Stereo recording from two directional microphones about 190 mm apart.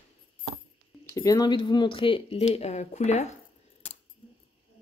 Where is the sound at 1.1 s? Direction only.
20° left (ahead or behind); by 3.4 s 35° left (ahead or behind).